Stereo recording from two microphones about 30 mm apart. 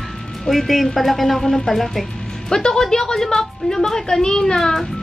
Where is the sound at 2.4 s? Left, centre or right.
Centre.